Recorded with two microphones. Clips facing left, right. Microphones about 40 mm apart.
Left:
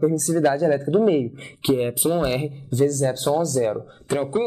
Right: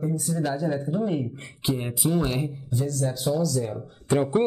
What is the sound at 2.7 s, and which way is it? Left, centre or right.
Speech, left.